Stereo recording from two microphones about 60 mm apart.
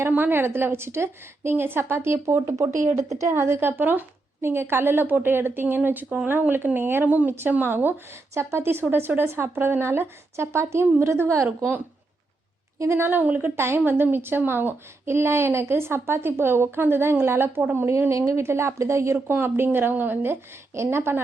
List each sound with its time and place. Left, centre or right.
0.2 s speech: right
3.0 s a woman's voice: right
3.3 s speech: right
8.3 s speech: right
11.4 s speech: right
12.9 s speech: right
18.1 s a woman's voice: right
19.1 s speech: right